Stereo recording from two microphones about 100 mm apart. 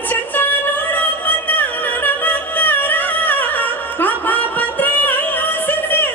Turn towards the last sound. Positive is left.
turn(degrees=20)  # may be behind; listen again after turning